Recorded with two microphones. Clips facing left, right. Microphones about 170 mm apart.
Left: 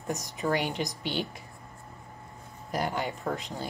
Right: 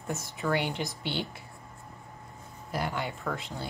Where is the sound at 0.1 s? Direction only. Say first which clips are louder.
Left 1 dB; 15° left (ahead or behind).